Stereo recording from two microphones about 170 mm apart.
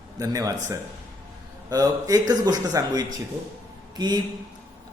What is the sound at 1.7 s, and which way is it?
Speech, 20° right (ahead or behind).